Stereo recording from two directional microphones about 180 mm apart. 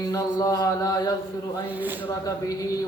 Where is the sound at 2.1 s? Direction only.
20° left (ahead or behind).